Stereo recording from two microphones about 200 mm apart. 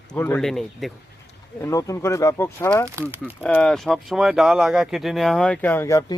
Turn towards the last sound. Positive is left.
turn(degrees=15)  # may be behind; listen again after turning